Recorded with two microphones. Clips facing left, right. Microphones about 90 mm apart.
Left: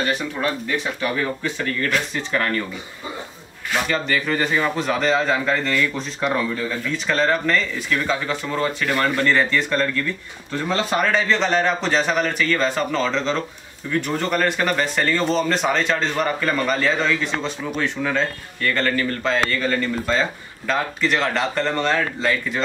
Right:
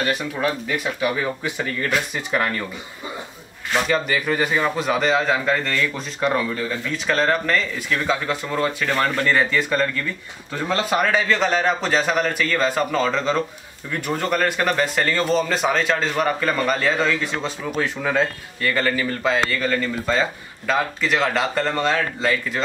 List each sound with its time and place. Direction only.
0.0 s speech: 5° right (ahead or behind)
3.7 s speech: 5° right (ahead or behind)